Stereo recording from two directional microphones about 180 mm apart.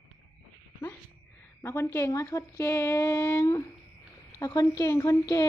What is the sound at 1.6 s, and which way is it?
Speech, 15° left (ahead or behind).